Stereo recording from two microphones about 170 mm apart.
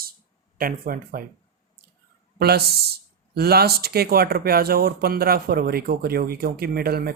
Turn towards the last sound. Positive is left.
turn(degrees=-65)  # may be behind; listen again after turning